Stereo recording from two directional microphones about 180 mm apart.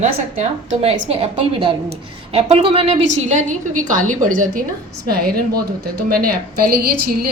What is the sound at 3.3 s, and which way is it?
A woman's voice, 45° right (ahead or behind).